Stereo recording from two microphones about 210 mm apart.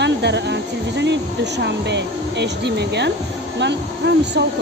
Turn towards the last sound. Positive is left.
turn(degrees=-55)  # may be behind; listen again after turning